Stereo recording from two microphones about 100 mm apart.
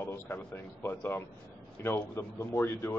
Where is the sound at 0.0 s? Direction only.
25° left (ahead or behind).